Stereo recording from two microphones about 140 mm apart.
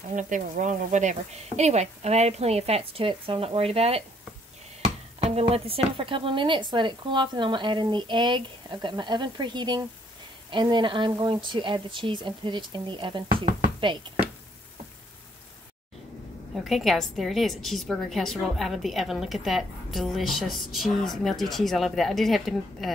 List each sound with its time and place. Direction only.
0.1 s speech: 65° right (ahead or behind); by 4.0 s 45° right (ahead or behind)
5.2 s speech: 45° right (ahead or behind)
16.6 s a woman's voice: centre (ahead or behind)